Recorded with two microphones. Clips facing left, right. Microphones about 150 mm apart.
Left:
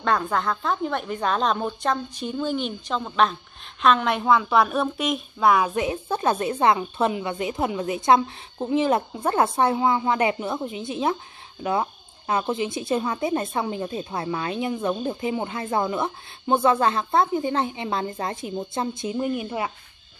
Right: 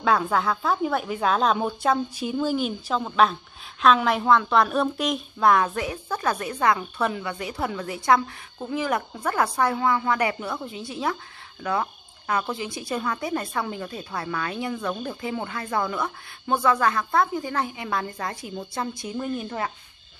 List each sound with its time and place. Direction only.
0.0 s speech: 5° right (ahead or behind)
5.7 s speech: 20° left (ahead or behind)
19.2 s speech: 10° left (ahead or behind)